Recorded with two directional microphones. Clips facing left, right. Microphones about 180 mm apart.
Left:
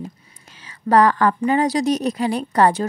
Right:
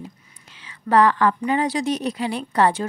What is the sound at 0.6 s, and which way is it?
Speech, 40° left (ahead or behind).